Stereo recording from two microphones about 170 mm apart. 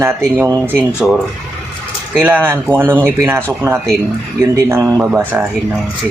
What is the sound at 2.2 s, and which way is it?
Speech, 10° right (ahead or behind).